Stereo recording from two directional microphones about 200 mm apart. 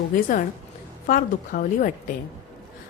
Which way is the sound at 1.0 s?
45° left (ahead or behind).